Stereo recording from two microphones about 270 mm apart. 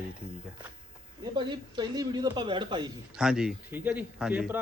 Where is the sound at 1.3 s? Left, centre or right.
Centre.